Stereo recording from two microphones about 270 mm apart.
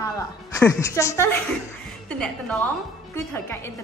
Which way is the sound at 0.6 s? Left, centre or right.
Centre.